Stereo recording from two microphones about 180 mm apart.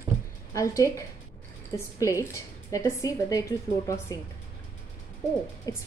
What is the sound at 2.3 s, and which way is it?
A woman's voice, 15° left (ahead or behind).